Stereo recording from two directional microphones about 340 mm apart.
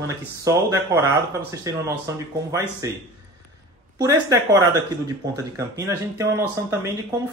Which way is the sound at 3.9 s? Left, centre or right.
Centre.